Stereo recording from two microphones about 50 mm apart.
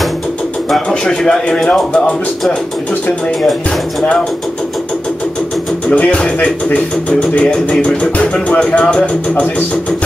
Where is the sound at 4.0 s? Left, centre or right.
Centre.